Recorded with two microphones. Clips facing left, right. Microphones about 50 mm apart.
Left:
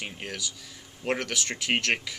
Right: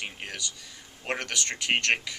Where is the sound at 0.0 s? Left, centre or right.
Centre.